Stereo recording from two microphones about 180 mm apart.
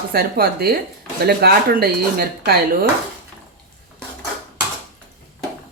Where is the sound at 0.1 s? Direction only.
55° right (ahead or behind).